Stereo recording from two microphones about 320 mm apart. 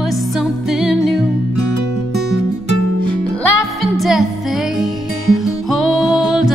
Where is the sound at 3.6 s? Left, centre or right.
Centre.